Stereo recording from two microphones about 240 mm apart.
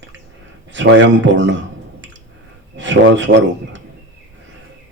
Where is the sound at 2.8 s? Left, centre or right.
Right.